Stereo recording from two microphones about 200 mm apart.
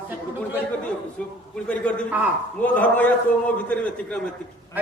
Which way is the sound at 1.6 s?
5° left (ahead or behind).